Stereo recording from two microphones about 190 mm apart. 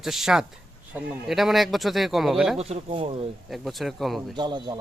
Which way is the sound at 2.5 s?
35° right (ahead or behind).